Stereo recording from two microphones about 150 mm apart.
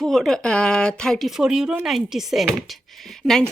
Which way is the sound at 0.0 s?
Centre (ahead or behind).